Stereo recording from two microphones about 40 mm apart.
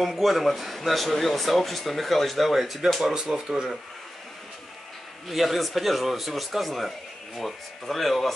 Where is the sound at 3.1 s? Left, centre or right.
Centre.